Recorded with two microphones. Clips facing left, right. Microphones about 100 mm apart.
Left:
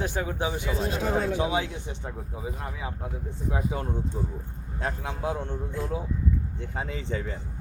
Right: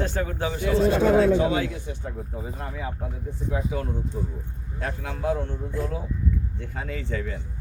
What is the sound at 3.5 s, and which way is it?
Speech, 30° left (ahead or behind).